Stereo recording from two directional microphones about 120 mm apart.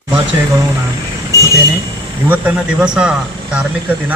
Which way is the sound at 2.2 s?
15° right (ahead or behind).